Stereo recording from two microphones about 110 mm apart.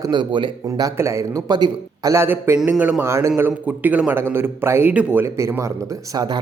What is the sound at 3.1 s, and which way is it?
Speech, 25° right (ahead or behind).